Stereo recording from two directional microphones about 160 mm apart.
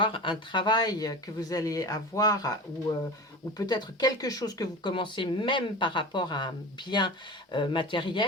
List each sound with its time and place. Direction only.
0.0 s speech: 30° left (ahead or behind)
3.6 s speech: 25° left (ahead or behind)
7.5 s speech: 30° left (ahead or behind)